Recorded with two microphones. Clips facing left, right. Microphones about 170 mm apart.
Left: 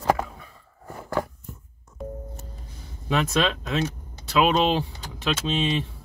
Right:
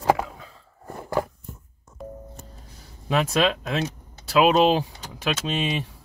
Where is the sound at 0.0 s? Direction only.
15° right (ahead or behind).